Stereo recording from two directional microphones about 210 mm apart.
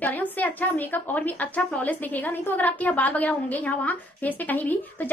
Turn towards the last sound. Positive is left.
turn(degrees=10)  # may be behind; listen again after turning